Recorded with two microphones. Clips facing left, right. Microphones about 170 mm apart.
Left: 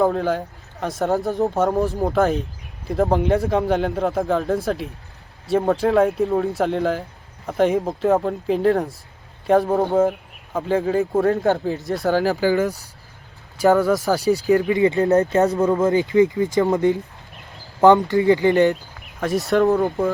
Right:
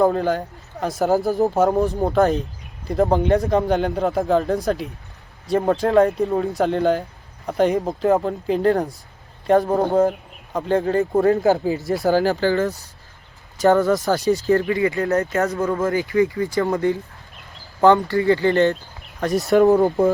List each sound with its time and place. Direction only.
0.0 s speech: centre (ahead or behind)
12.5 s speech: 10° left (ahead or behind)
15.3 s speech: 30° left (ahead or behind)
15.6 s speech: 20° left (ahead or behind)
19.2 s speech: centre (ahead or behind)
19.6 s speech: 15° right (ahead or behind)